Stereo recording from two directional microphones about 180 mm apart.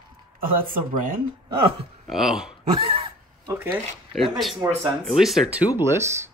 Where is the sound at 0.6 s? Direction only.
50° right (ahead or behind).